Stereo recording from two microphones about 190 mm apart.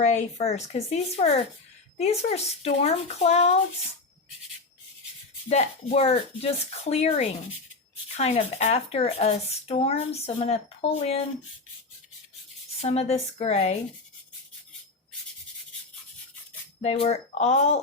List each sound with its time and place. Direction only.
0.0 s speech: 40° left (ahead or behind)
5.5 s speech: 35° left (ahead or behind)
12.8 s speech: 35° left (ahead or behind)
16.8 s speech: 35° left (ahead or behind)